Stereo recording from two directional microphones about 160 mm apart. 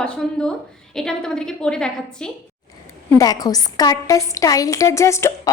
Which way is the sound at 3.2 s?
25° left (ahead or behind).